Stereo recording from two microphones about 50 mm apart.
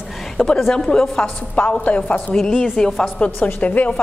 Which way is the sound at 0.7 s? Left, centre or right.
Centre.